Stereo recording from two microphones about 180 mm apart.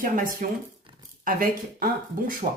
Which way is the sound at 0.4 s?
50° right (ahead or behind).